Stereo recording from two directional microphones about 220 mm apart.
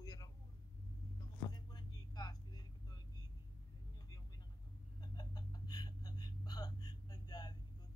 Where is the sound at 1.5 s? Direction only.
20° left (ahead or behind).